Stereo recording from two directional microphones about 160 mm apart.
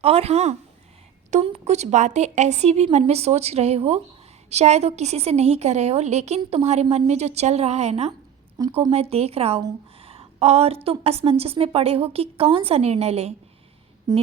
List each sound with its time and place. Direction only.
0.0 s a woman's voice: 40° right (ahead or behind)
10.0 s a sound: 35° right (ahead or behind)
10.8 s a woman's voice: 40° right (ahead or behind)
14.1 s speech: 25° right (ahead or behind)